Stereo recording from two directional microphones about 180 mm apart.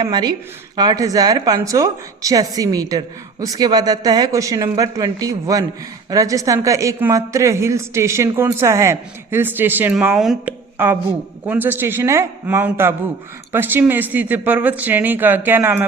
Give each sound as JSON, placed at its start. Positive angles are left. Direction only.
{"t": 0.0, "sound": "a woman's voice", "side_deg": -20}